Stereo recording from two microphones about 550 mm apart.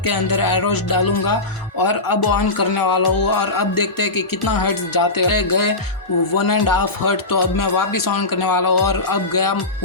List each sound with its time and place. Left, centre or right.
0.1 s speech: left